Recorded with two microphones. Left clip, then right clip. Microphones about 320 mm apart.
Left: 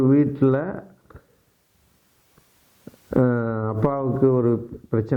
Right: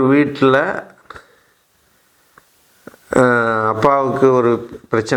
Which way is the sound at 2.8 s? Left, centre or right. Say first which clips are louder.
Right 8 dB; centre.